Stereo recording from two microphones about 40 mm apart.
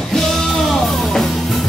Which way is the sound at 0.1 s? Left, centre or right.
Centre.